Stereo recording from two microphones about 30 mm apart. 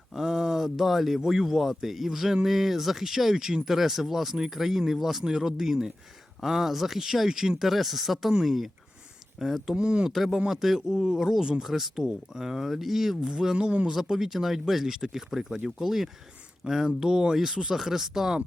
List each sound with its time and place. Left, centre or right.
0.1 s speech: centre
9.7 s speech: right
10.1 s speech: centre
11.6 s speech: centre
11.9 s speech: centre
13.5 s speech: right
13.9 s speech: centre
17.3 s speech: centre